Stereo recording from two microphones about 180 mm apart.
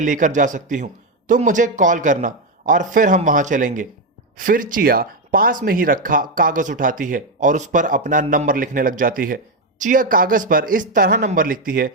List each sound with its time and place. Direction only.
0.0 s speech: 45° right (ahead or behind)